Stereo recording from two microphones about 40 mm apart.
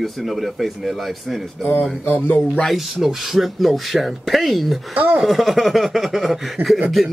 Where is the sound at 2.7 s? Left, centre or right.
Centre.